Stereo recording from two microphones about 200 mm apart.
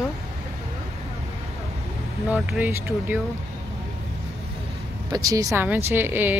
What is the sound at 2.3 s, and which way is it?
Speech, centre (ahead or behind).